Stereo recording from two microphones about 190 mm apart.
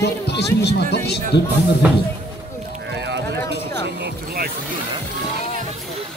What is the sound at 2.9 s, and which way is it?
Clip-clop, 65° right (ahead or behind).